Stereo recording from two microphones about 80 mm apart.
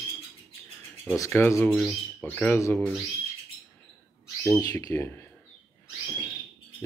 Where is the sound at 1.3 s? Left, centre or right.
Left.